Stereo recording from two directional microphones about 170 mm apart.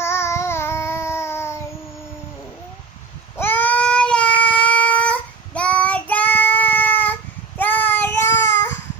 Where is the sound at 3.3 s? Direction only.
10° left (ahead or behind).